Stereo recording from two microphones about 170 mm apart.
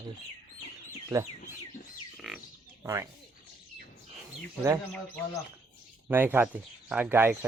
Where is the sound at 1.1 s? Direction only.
25° right (ahead or behind).